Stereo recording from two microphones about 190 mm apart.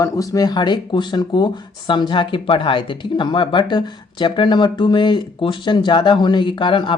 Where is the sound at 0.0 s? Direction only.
20° left (ahead or behind).